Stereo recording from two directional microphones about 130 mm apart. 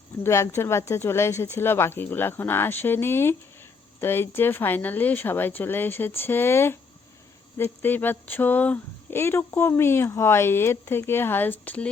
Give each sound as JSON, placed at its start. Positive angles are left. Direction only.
{"t": 0.2, "sound": "speech", "side_deg": 20}